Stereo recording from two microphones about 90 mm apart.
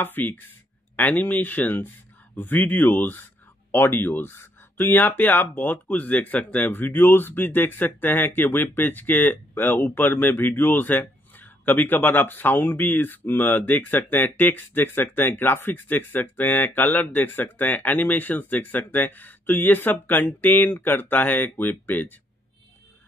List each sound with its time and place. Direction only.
0.0 s speech: 20° left (ahead or behind)